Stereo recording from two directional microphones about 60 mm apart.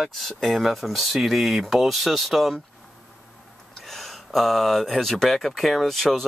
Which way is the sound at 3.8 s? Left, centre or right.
Centre.